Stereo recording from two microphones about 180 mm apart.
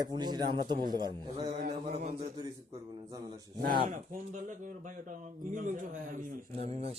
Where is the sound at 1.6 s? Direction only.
40° right (ahead or behind).